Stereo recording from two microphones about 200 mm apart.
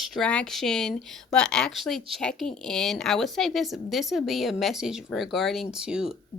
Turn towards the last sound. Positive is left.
turn(degrees=-5)  # may be behind; listen again after turning